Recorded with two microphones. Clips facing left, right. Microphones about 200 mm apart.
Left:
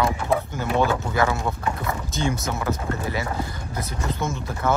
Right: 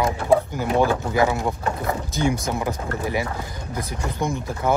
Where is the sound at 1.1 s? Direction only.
15° right (ahead or behind).